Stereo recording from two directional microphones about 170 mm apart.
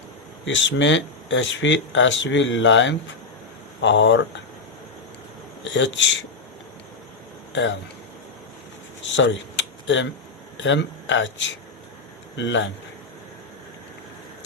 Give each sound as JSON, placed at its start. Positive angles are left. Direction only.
{"t": 0.4, "sound": "speech", "side_deg": 90}
{"t": 5.7, "sound": "speech", "side_deg": 90}
{"t": 7.5, "sound": "speech", "side_deg": 90}
{"t": 9.1, "sound": "a sound", "side_deg": 90}
{"t": 10.6, "sound": "speech", "side_deg": 90}